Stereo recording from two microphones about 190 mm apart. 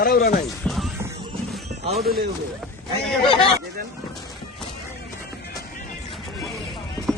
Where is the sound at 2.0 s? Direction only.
55° right (ahead or behind).